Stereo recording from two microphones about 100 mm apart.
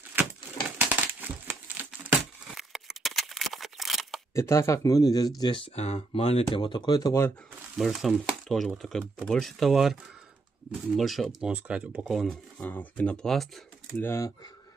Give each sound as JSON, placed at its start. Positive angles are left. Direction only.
{"t": 0.1, "sound": "crumpling", "side_deg": -20}
{"t": 2.5, "sound": "a sound", "side_deg": 0}
{"t": 4.3, "sound": "speech", "side_deg": 30}
{"t": 5.8, "sound": "speech", "side_deg": 90}
{"t": 6.6, "sound": "speech", "side_deg": 50}
{"t": 7.7, "sound": "speech", "side_deg": 0}
{"t": 11.0, "sound": "speech", "side_deg": 0}
{"t": 11.4, "sound": "speech", "side_deg": -10}
{"t": 12.0, "sound": "speech", "side_deg": 0}
{"t": 12.6, "sound": "speech", "side_deg": 15}
{"t": 13.9, "sound": "speech", "side_deg": 20}